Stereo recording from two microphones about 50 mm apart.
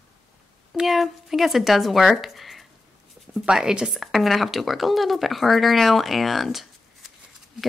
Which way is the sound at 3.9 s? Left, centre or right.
Centre.